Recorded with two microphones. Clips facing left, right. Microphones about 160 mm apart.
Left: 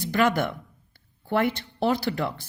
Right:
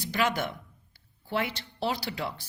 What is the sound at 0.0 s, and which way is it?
A woman's voice, 50° left (ahead or behind).